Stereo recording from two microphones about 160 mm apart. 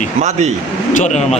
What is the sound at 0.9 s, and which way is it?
Speech, 45° left (ahead or behind).